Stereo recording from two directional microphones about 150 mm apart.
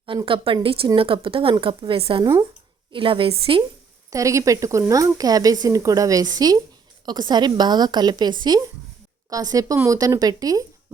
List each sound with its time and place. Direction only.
0.3 s a woman's voice: 35° right (ahead or behind)
4.1 s speech: 20° right (ahead or behind)